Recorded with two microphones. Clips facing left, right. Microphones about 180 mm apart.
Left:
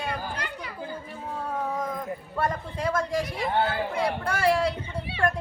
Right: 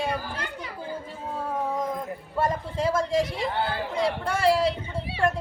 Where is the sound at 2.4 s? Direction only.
25° right (ahead or behind).